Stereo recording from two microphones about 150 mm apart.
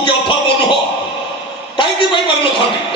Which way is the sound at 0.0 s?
30° left (ahead or behind).